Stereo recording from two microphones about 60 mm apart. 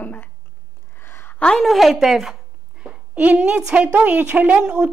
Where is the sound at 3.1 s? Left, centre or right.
Right.